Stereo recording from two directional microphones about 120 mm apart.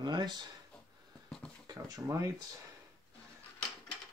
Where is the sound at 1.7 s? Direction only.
30° right (ahead or behind).